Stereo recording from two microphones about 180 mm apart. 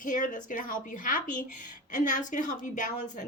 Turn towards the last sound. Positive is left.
turn(degrees=45)  # may be behind; listen again after turning